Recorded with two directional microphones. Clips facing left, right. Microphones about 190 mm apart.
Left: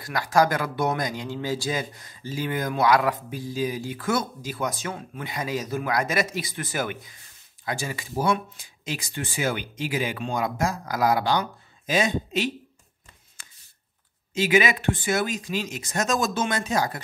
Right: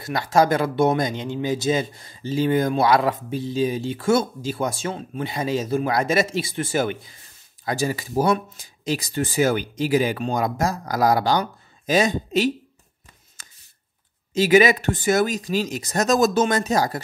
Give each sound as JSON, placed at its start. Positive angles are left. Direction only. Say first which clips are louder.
{"t": 0.0, "sound": "speech", "louder": "right 3 dB", "side_deg": -25}
{"t": 13.4, "sound": "a sound", "louder": "right 2 dB", "side_deg": -40}
{"t": 14.3, "sound": "speech", "louder": "right 6 dB", "side_deg": -40}